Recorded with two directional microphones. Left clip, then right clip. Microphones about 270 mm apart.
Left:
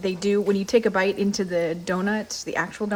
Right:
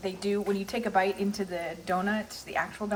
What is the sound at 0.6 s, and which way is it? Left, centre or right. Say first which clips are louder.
Speech: left 7 dB; left.